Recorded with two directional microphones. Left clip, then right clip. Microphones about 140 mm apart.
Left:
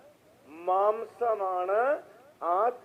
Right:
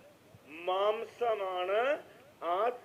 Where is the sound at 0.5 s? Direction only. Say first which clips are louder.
Left 6 dB; 15° right (ahead or behind).